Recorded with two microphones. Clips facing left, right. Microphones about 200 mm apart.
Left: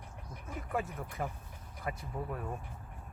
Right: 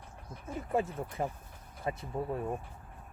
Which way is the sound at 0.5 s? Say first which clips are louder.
Right 5 dB; 25° right (ahead or behind).